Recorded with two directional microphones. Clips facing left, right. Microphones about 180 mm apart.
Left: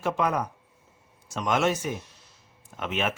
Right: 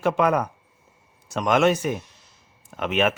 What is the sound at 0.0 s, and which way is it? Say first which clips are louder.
Speech: right 5 dB; 70° right (ahead or behind).